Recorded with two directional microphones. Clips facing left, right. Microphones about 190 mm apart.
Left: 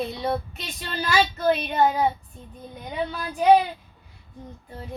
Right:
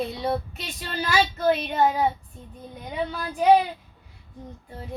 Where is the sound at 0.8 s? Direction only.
5° right (ahead or behind).